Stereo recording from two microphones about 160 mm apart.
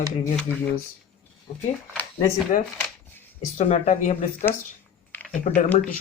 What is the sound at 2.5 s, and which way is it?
Speech, 50° left (ahead or behind).